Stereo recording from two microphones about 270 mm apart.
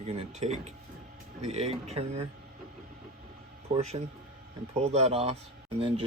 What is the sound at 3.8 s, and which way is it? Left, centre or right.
Speech, right.